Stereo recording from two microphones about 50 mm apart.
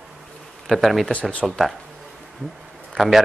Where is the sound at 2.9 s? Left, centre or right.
Centre.